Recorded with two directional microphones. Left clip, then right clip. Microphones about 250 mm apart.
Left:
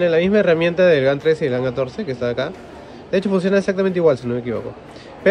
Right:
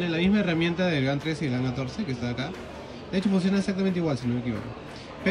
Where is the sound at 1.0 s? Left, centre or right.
Left.